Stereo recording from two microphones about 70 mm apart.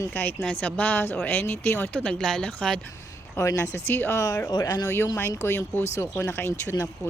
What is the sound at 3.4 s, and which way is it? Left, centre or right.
Speech, left.